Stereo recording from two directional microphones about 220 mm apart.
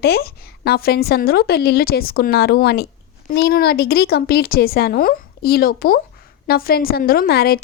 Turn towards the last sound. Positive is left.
turn(degrees=45)  # may be behind; listen again after turning